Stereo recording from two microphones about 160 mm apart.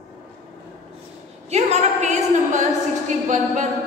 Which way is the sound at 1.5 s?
45° right (ahead or behind).